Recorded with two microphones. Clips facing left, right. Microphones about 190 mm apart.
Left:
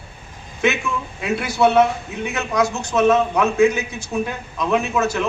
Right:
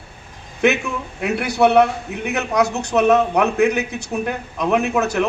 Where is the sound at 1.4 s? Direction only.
65° right (ahead or behind).